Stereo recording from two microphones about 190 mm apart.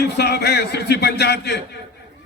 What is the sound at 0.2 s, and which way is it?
A man's voice, 55° left (ahead or behind).